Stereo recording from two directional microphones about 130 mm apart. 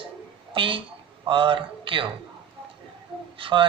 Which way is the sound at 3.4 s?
40° right (ahead or behind).